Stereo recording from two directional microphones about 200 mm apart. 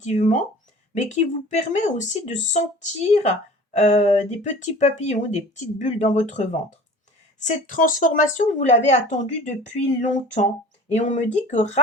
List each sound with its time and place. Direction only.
0.0 s speech: 35° left (ahead or behind)